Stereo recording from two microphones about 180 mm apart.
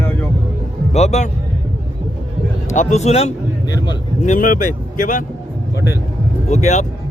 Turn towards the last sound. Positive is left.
turn(degrees=40)  # may be behind; listen again after turning